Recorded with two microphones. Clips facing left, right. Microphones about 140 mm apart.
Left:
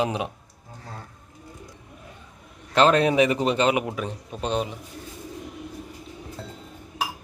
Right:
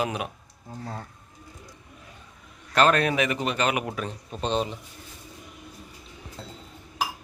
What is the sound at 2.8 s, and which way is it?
A man's voice, 25° left (ahead or behind).